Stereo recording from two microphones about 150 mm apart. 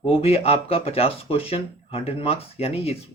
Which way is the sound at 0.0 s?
40° left (ahead or behind).